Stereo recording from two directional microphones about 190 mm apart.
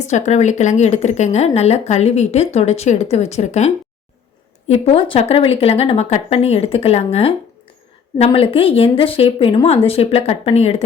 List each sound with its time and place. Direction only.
0.0 s speech: 35° left (ahead or behind)
4.7 s speech: 30° left (ahead or behind)